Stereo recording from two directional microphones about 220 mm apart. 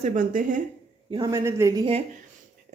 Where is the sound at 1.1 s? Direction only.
15° right (ahead or behind).